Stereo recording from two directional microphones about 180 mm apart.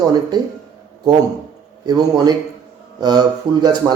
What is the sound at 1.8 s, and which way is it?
Speech, 25° right (ahead or behind).